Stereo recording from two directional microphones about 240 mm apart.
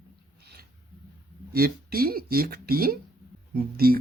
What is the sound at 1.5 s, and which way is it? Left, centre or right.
Speech, right.